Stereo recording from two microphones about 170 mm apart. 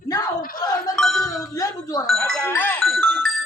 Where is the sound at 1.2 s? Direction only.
20° left (ahead or behind).